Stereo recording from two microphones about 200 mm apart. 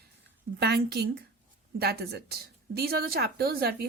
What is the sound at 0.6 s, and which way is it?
Speech, 55° right (ahead or behind).